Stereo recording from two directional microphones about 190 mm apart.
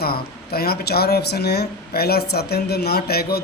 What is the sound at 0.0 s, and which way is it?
Speech, 55° left (ahead or behind).